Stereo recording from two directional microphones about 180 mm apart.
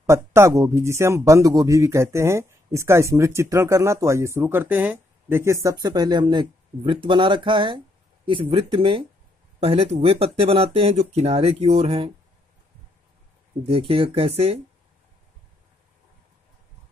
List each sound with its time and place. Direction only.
0.0 s speech: 15° right (ahead or behind); by 12.1 s 35° right (ahead or behind)
13.7 s speech: 30° right (ahead or behind)